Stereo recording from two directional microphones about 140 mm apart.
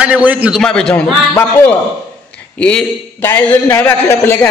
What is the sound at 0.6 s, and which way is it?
Speech, 5° left (ahead or behind).